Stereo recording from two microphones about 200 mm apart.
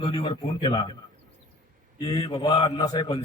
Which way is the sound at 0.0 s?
25° left (ahead or behind).